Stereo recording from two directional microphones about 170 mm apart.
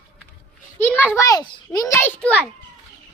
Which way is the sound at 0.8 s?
10° left (ahead or behind).